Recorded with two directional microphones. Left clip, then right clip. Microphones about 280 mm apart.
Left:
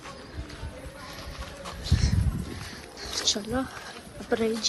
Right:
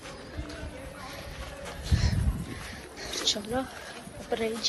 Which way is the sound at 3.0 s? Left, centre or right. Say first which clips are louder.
Left 2 dB; centre.